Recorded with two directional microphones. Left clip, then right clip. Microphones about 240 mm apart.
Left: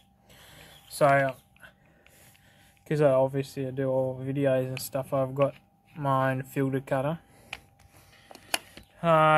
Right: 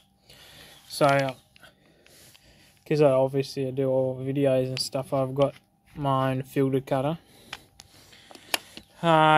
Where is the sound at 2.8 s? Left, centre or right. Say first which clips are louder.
Right 2 dB; centre.